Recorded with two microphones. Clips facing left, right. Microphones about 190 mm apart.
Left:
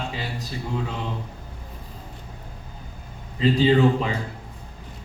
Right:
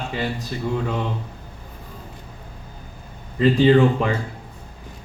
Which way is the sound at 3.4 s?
50° right (ahead or behind).